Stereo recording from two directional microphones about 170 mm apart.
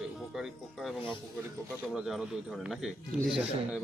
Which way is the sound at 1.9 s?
5° right (ahead or behind).